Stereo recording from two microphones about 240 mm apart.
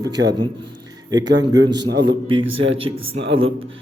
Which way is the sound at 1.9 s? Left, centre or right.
Right.